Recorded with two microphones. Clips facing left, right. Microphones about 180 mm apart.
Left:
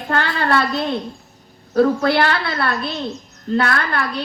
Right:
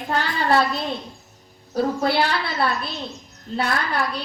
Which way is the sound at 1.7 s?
65° left (ahead or behind).